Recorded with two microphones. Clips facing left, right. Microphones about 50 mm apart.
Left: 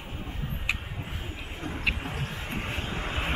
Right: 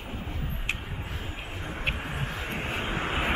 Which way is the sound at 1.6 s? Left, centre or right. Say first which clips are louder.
Left 2 dB; centre.